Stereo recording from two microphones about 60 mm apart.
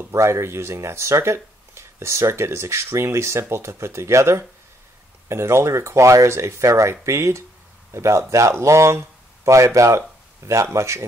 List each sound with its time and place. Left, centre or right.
0.1 s speech: right